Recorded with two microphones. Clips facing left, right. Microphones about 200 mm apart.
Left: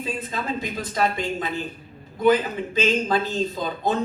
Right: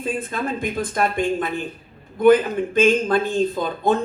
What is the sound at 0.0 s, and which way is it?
Speech, 50° right (ahead or behind).